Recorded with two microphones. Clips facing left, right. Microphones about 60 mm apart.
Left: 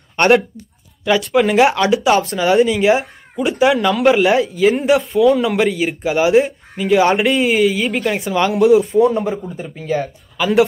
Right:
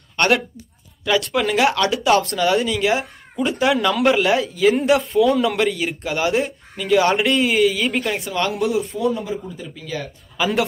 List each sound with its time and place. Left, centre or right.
1.0 s speech: centre
3.0 s speech: centre
8.9 s a man's voice: left
9.8 s speech: left
10.3 s speech: centre